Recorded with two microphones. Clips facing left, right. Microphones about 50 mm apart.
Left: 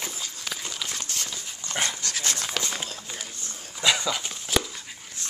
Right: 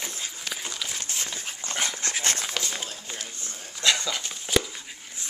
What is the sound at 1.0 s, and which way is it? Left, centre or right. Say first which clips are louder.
Dog: right 1 dB; right.